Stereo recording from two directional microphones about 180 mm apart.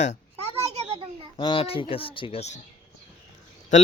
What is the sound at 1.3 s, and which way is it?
Speech, 30° left (ahead or behind).